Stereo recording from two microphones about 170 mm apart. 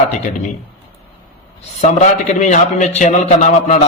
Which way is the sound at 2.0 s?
45° left (ahead or behind).